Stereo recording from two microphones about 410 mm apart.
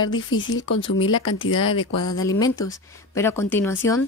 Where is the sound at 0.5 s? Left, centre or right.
Centre.